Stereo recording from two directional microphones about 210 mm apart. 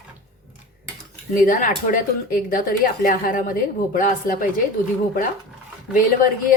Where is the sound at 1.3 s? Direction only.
40° left (ahead or behind).